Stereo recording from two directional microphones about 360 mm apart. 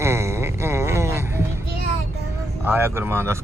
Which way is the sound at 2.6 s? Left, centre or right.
Centre.